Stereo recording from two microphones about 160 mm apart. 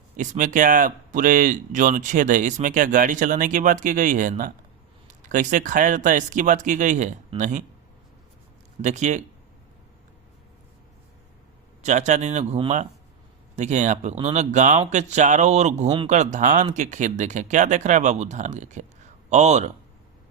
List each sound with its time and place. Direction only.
0.2 s speech: 55° right (ahead or behind)
8.8 s speech: 45° right (ahead or behind)
11.8 s speech: 45° right (ahead or behind)